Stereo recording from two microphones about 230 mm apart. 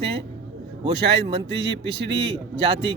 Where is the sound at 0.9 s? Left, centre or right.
Right.